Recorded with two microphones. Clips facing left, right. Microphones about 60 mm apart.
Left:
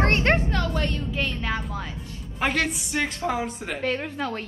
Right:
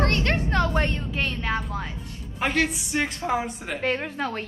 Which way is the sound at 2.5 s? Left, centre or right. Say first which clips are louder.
Right 1 dB; centre.